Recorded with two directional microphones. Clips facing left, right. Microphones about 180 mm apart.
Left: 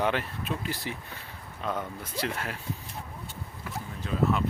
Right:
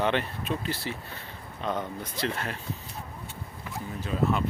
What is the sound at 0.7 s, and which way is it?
Speech, 15° left (ahead or behind).